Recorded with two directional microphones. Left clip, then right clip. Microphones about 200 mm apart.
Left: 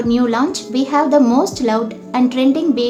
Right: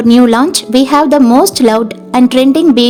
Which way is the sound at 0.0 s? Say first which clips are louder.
Right 8 dB; 55° right (ahead or behind).